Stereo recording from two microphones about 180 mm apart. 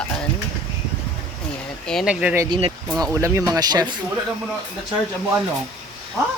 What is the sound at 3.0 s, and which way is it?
Speech, 15° right (ahead or behind).